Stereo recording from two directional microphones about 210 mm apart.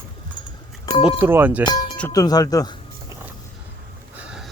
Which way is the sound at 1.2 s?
10° right (ahead or behind).